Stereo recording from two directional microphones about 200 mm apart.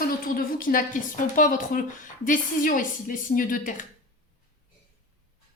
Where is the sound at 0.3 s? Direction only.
45° left (ahead or behind).